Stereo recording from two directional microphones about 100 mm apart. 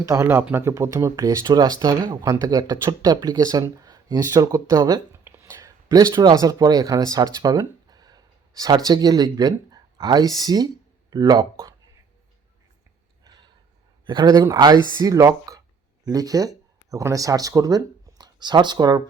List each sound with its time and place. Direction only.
0.0 s speech: 35° right (ahead or behind)
0.5 s speech: 25° right (ahead or behind)
5.2 s a sound: 25° right (ahead or behind)
5.5 s speech: 35° right (ahead or behind)
14.0 s speech: 50° right (ahead or behind)